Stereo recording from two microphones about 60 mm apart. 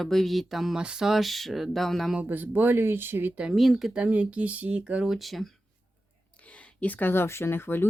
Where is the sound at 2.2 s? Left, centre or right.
Right.